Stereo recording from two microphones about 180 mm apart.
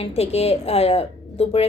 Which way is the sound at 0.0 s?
35° left (ahead or behind).